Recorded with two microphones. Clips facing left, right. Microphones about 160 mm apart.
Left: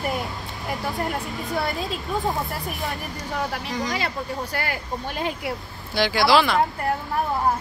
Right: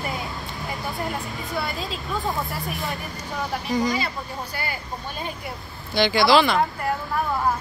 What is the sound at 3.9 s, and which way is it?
Speech, 75° left (ahead or behind).